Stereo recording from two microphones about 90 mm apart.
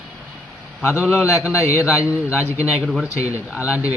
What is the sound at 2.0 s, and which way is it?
Speech, 15° right (ahead or behind).